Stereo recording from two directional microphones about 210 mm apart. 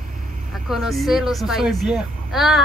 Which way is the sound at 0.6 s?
Centre (ahead or behind).